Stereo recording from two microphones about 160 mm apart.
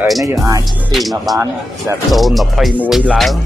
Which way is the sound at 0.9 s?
Centre (ahead or behind).